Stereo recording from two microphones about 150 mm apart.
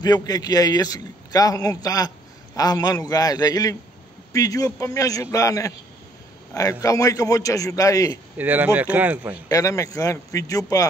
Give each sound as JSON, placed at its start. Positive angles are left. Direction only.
{"t": 0.0, "sound": "a man's voice", "side_deg": 25}
{"t": 8.4, "sound": "speech", "side_deg": -10}
{"t": 9.5, "sound": "a man's voice", "side_deg": 20}